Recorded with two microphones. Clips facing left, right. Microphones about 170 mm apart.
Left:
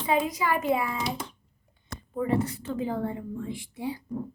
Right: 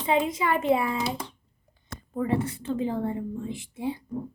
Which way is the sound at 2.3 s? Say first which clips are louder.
Even; 25° right (ahead or behind).